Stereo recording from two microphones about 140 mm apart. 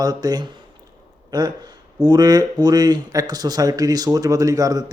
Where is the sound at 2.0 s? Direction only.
30° right (ahead or behind).